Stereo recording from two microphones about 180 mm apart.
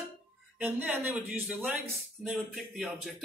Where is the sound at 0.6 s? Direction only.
10° right (ahead or behind).